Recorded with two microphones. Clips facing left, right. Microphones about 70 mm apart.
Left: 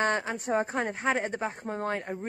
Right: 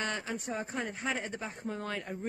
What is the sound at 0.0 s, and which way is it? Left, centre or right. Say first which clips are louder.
Speech: left 8 dB; left.